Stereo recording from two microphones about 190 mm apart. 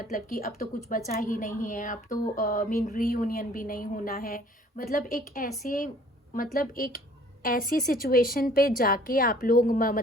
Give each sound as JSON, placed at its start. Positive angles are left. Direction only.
{"t": 0.0, "sound": "a woman's voice", "side_deg": 45}